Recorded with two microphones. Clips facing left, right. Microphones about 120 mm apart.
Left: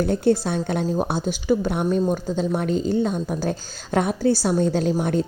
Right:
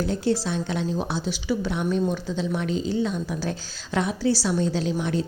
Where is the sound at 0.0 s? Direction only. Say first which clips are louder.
Left 5 dB; 55° left (ahead or behind).